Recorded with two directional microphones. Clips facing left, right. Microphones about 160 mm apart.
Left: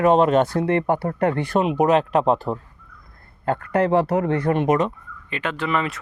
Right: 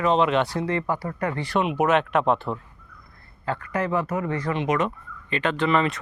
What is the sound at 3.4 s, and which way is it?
Speech, 50° left (ahead or behind).